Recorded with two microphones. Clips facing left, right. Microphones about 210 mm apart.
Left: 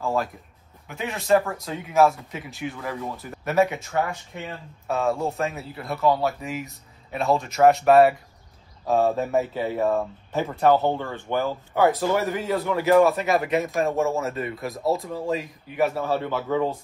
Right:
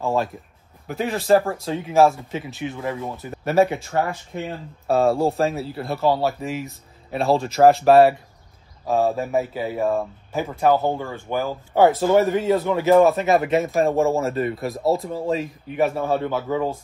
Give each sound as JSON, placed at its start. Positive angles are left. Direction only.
{"t": 0.0, "sound": "a man's voice", "side_deg": -25}
{"t": 0.8, "sound": "a man's voice", "side_deg": -35}
{"t": 8.9, "sound": "speech", "side_deg": -10}
{"t": 11.7, "sound": "a man's voice", "side_deg": -25}
{"t": 16.3, "sound": "speech", "side_deg": -10}